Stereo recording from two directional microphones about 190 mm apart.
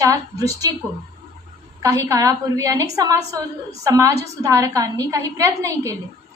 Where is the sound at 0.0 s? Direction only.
20° right (ahead or behind).